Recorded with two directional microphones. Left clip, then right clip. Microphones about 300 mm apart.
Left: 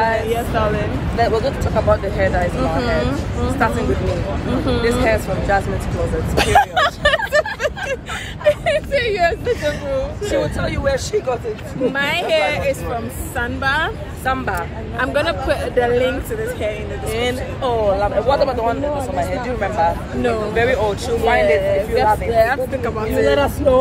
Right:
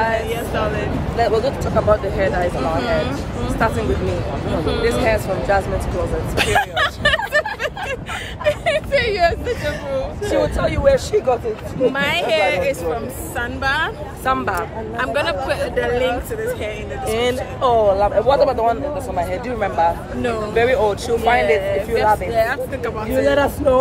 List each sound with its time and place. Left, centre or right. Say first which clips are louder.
0.2 s speech: left 3 dB; centre
1.1 s speech: even; centre
5.0 s speech: even; centre
6.3 s speech: left 4 dB; centre
7.3 s vehicle: left 2 dB; centre
8.5 s speech: left 2 dB; centre
17.1 s speech: right 2 dB; centre
20.5 s speech: right 4 dB; centre
23.3 s speech: left 1 dB; right